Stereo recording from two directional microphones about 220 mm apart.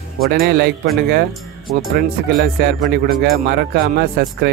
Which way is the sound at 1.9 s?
50° right (ahead or behind).